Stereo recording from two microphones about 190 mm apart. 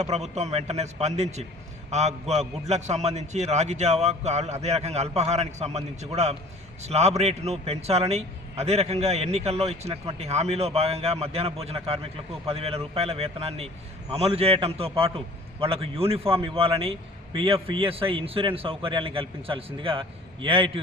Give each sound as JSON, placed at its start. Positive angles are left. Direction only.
{"t": 0.0, "sound": "a man's voice", "side_deg": -35}